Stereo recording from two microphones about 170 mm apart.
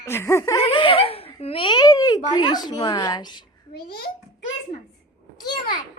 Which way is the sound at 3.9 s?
70° left (ahead or behind).